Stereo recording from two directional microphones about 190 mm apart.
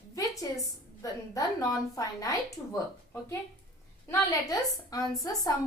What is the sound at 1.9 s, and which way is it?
Speech, 20° left (ahead or behind).